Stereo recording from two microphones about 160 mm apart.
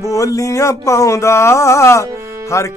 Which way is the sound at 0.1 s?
20° left (ahead or behind).